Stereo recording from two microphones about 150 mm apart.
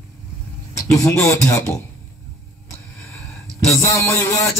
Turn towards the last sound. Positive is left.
turn(degrees=20)  # may be behind; listen again after turning